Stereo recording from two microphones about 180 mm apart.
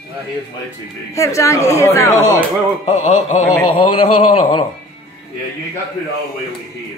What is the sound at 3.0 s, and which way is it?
Speech, 40° left (ahead or behind).